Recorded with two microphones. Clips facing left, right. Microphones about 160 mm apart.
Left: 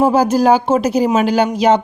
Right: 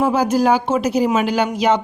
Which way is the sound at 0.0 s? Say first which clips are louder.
Left 4 dB; 35° left (ahead or behind).